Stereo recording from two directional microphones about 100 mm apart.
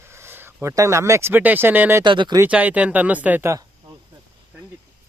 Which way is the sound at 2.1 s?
50° right (ahead or behind).